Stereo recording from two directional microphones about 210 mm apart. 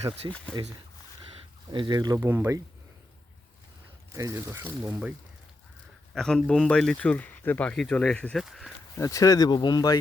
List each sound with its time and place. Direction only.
0.0 s speech: 30° right (ahead or behind)
1.7 s speech: 20° right (ahead or behind)
4.1 s speech: 15° right (ahead or behind)
6.1 s speech: 5° left (ahead or behind)
9.0 s speech: 15° left (ahead or behind)